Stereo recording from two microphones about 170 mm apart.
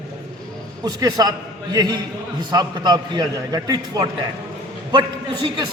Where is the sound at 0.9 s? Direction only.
20° right (ahead or behind).